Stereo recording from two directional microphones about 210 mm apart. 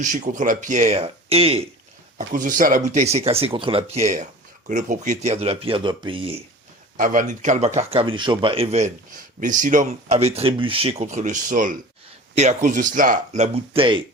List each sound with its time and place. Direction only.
0.0 s speech: 40° right (ahead or behind)
2.1 s speech: 40° right (ahead or behind)
6.9 s speech: 40° right (ahead or behind)